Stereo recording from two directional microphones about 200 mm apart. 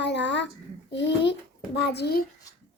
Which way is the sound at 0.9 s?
60° left (ahead or behind).